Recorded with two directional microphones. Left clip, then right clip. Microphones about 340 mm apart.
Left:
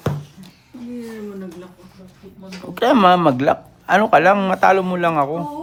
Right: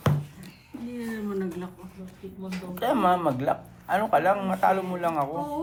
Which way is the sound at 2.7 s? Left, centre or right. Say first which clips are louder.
Left 10 dB; left.